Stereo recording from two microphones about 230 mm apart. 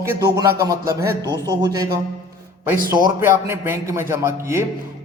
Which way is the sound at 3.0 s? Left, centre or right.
Centre.